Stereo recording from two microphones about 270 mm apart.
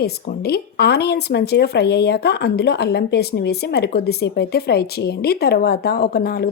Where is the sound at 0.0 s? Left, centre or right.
Left.